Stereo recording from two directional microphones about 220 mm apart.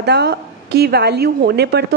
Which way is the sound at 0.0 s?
50° right (ahead or behind).